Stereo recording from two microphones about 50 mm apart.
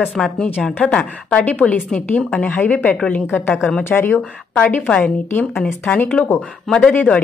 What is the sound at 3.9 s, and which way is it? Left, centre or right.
Speech, left.